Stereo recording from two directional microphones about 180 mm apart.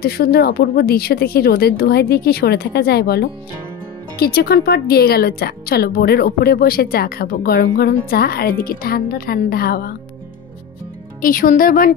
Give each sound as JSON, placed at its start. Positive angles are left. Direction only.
{"t": 0.0, "sound": "speech", "side_deg": 55}
{"t": 11.1, "sound": "speech", "side_deg": 50}